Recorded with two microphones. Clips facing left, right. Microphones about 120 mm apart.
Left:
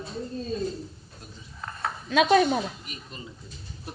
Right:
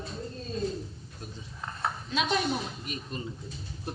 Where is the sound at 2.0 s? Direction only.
70° left (ahead or behind).